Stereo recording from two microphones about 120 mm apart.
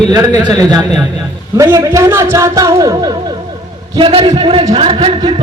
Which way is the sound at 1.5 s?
25° right (ahead or behind).